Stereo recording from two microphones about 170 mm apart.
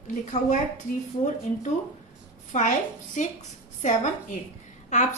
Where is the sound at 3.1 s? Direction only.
45° left (ahead or behind).